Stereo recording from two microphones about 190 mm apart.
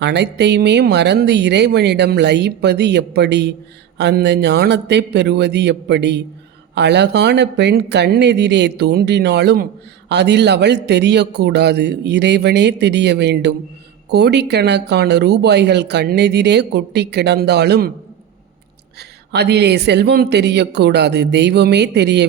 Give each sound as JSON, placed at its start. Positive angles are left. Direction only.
{"t": 0.0, "sound": "speech", "side_deg": -65}
{"t": 18.9, "sound": "speech", "side_deg": -60}